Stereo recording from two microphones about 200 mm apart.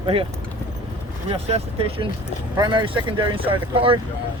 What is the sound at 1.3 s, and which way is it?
Speech, 30° right (ahead or behind).